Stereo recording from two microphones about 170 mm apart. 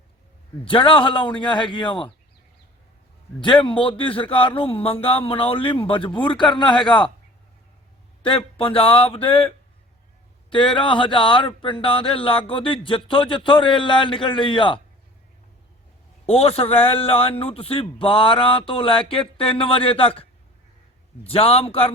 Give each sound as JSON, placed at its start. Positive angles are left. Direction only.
{"t": 0.6, "sound": "a man's voice", "side_deg": 30}
{"t": 3.4, "sound": "a man's voice", "side_deg": 30}
{"t": 8.2, "sound": "speech", "side_deg": 30}
{"t": 10.5, "sound": "speech", "side_deg": 30}
{"t": 16.2, "sound": "speech", "side_deg": 35}
{"t": 21.2, "sound": "speech", "side_deg": 35}